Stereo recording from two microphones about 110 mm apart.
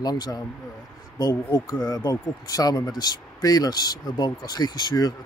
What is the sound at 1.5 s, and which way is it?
Speech, 35° left (ahead or behind).